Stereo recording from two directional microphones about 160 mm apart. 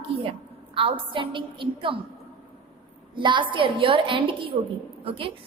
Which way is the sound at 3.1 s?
30° right (ahead or behind).